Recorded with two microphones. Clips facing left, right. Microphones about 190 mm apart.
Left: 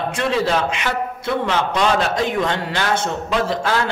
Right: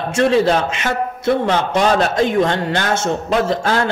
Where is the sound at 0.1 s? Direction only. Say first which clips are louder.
Right 7 dB; 45° right (ahead or behind).